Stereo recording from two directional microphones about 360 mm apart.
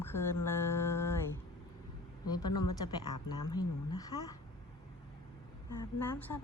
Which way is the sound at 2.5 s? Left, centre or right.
Left.